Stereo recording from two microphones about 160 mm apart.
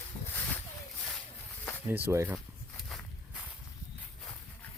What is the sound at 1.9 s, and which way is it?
Speech, 15° right (ahead or behind).